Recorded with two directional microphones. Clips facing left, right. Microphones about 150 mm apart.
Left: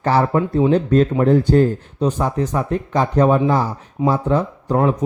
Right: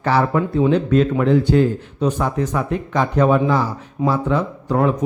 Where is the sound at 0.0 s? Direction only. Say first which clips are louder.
Left 1 dB; 35° left (ahead or behind).